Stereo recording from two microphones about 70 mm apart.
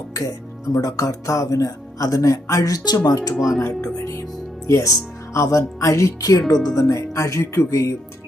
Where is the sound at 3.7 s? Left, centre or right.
Left.